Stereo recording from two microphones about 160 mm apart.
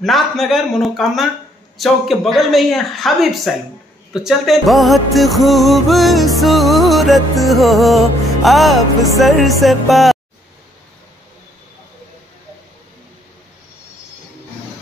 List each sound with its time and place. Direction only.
0.0 s music: centre (ahead or behind)